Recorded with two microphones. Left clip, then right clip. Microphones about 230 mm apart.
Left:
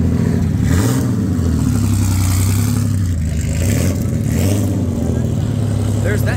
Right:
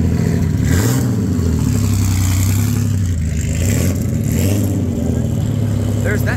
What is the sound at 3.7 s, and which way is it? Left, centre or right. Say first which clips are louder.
Vehicle: even; centre.